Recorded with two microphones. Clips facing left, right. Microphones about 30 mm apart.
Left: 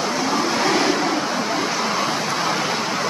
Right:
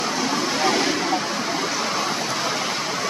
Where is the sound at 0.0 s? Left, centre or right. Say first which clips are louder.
Left 2 dB; centre.